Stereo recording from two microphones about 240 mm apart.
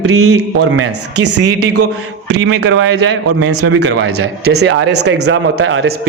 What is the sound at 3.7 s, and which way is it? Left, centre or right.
Speech, right.